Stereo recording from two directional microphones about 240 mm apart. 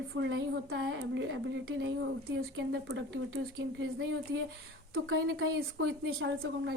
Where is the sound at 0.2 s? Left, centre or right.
Right.